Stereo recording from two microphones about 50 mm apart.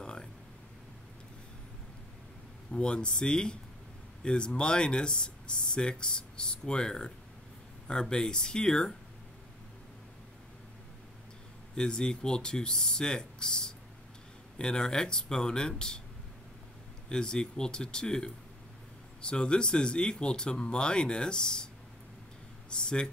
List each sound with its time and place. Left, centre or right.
0.0 s a sound: centre
2.7 s speech: centre
11.7 s speech: centre
17.1 s speech: centre
22.7 s speech: centre